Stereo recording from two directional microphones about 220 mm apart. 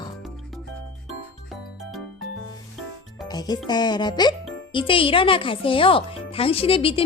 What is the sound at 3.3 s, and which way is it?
Speech, 20° left (ahead or behind).